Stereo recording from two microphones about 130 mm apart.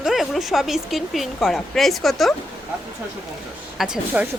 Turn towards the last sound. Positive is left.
turn(degrees=-5)  # may be behind; listen again after turning